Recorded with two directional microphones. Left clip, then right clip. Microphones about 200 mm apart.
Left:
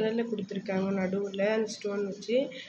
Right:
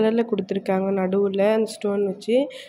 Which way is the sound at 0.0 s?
45° right (ahead or behind).